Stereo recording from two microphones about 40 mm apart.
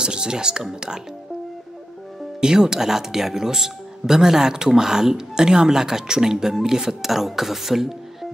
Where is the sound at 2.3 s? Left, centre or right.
Centre.